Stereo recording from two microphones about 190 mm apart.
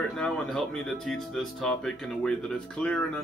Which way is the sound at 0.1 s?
5° left (ahead or behind).